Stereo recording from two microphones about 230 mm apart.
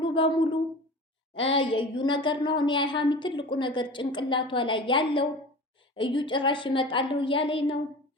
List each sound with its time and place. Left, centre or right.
0.0 s a woman's voice: left